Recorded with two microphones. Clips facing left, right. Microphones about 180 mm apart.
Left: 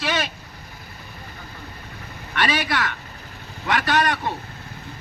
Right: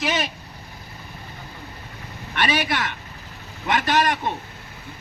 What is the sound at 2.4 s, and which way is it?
A man's voice, 25° right (ahead or behind).